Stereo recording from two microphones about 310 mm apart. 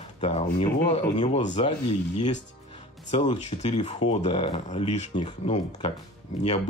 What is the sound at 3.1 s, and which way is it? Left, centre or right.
Speech, left.